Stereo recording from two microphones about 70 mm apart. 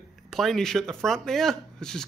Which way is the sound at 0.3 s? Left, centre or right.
Centre.